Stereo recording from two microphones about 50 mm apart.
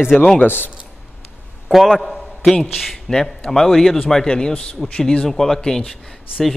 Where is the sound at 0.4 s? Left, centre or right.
Left.